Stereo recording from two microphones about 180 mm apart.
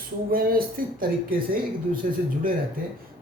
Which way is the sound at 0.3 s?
55° right (ahead or behind).